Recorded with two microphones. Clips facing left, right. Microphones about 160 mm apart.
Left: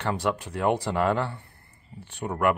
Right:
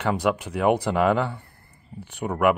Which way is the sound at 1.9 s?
5° left (ahead or behind).